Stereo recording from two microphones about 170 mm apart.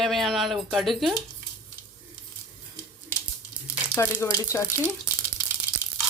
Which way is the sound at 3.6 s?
15° left (ahead or behind).